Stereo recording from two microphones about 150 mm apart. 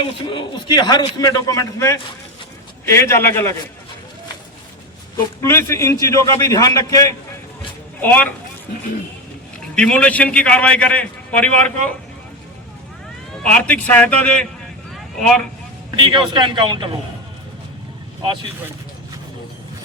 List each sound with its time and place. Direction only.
0.3 s a man's voice: 30° left (ahead or behind); by 3.5 s 15° left (ahead or behind)
5.4 s a man's voice: 15° left (ahead or behind)
8.0 s a man's voice: 10° left (ahead or behind)
9.7 s a man's voice: 5° left (ahead or behind)
13.4 s a man's voice: 5° left (ahead or behind)
16.0 s a man's voice: 30° right (ahead or behind)